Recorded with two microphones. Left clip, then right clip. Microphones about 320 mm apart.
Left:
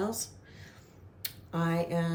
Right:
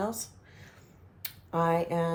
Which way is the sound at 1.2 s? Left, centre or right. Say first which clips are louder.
Right 6 dB; centre.